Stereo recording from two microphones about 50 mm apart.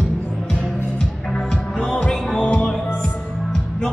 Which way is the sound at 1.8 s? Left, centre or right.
Left.